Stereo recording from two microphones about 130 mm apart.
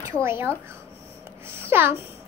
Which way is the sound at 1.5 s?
20° right (ahead or behind).